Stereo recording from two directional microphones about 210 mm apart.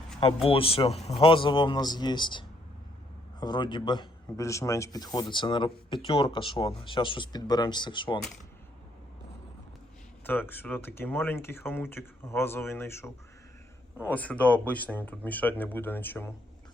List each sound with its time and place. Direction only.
0.4 s speech: 25° left (ahead or behind)
10.2 s speech: 10° left (ahead or behind)